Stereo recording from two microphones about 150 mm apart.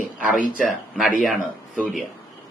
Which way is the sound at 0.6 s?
Centre (ahead or behind).